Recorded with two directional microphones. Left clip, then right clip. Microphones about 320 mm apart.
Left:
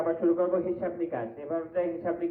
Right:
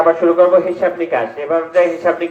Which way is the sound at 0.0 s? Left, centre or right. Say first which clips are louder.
Right 16 dB; right.